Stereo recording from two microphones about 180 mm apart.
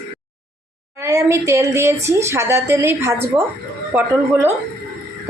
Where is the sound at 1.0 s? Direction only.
15° right (ahead or behind).